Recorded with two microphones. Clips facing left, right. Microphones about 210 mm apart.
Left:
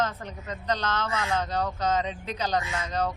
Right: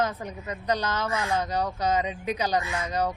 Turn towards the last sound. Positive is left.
turn(degrees=-10)  # may be behind; listen again after turning